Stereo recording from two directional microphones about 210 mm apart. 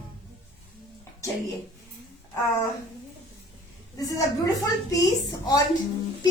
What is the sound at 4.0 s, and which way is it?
A woman's voice, 15° left (ahead or behind).